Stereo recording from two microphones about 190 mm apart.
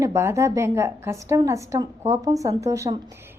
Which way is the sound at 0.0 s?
15° right (ahead or behind).